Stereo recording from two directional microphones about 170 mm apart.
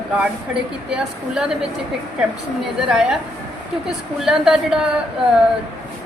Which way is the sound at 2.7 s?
5° right (ahead or behind).